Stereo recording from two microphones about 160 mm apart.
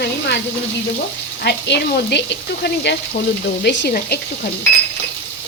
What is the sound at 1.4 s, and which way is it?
Speech, 90° left.